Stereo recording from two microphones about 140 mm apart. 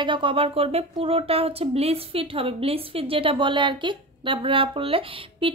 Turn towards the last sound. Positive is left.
turn(degrees=-40)  # may be behind; listen again after turning